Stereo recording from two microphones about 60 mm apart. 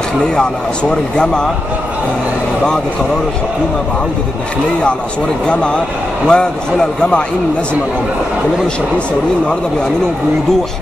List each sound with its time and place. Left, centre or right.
0.4 s speech: centre
6.2 s speech: centre